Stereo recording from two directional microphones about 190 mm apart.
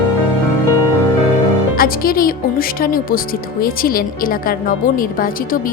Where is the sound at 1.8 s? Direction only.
50° left (ahead or behind).